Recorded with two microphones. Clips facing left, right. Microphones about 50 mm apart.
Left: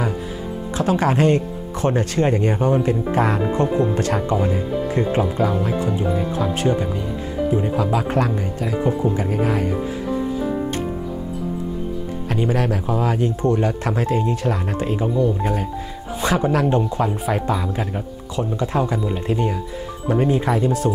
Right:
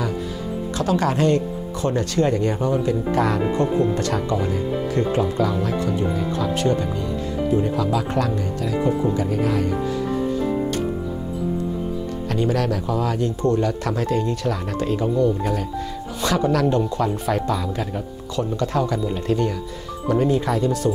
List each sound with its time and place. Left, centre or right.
0.7 s speech: left
7.7 s speech: left
12.3 s speech: centre